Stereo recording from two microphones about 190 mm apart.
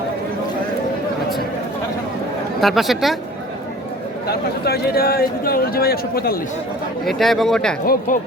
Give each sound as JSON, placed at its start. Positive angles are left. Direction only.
{"t": 2.6, "sound": "speech", "side_deg": 0}
{"t": 4.3, "sound": "speech", "side_deg": 55}
{"t": 7.0, "sound": "speech", "side_deg": 0}
{"t": 7.9, "sound": "speech", "side_deg": 45}